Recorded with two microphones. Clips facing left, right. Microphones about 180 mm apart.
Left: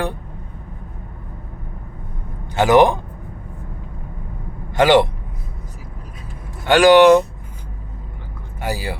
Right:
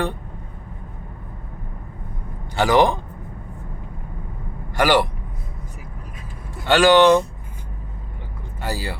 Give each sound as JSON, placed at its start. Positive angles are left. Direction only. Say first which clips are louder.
{"t": 2.6, "sound": "a man's voice", "louder": "left 4 dB", "side_deg": 20}
{"t": 4.7, "sound": "a man's voice", "louder": "left 5 dB", "side_deg": 25}
{"t": 6.7, "sound": "speech", "louder": "left 4 dB", "side_deg": 15}
{"t": 8.6, "sound": "speech", "louder": "left 3 dB", "side_deg": 15}